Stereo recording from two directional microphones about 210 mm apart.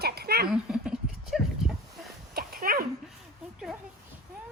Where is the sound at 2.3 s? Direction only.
45° right (ahead or behind).